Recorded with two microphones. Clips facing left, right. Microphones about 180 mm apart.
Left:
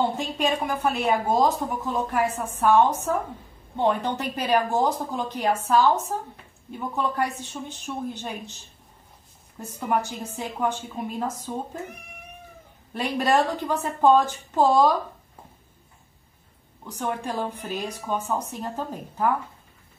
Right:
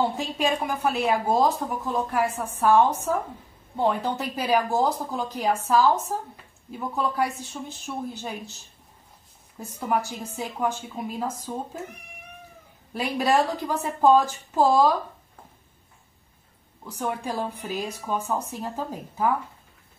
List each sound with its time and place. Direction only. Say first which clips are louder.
0.1 s speech: even; 5° right (ahead or behind)
9.6 s speech: left 1 dB; centre (ahead or behind)
12.9 s speech: even; 5° right (ahead or behind)
17.0 s a woman's voice: even; 10° right (ahead or behind)